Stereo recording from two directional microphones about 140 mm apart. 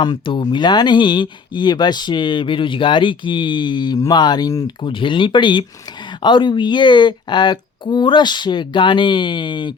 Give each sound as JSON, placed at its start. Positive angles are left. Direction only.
{"t": 0.0, "sound": "speech", "side_deg": 35}